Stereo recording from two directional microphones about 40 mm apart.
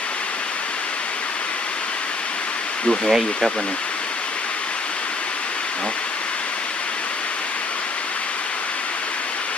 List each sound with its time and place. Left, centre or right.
3.1 s speech: centre